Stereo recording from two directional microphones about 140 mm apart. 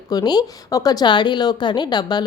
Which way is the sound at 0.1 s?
30° left (ahead or behind).